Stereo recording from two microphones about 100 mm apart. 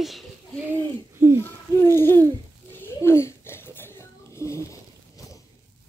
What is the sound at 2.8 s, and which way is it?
Babbling, 25° left (ahead or behind).